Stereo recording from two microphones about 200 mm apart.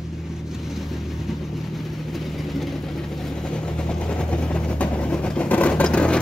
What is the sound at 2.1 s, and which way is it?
Vehicle, centre (ahead or behind).